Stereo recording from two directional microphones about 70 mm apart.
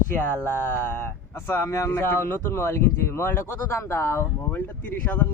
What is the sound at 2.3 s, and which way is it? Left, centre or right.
Speech, left.